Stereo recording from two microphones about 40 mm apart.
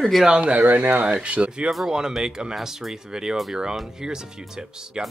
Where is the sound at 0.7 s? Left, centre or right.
Right.